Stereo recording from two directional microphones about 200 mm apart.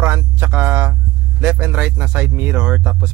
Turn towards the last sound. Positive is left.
turn(degrees=-5)  # may be behind; listen again after turning